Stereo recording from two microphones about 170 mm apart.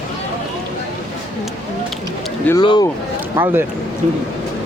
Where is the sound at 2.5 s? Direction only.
10° left (ahead or behind).